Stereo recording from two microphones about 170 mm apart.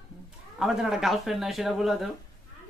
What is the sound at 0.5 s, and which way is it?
Speech, centre (ahead or behind).